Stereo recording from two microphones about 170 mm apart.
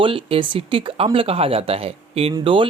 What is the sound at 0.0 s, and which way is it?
Speech, 30° right (ahead or behind).